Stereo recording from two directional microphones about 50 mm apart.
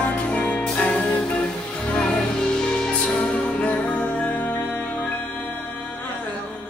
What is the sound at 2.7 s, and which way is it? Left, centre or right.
Music, centre.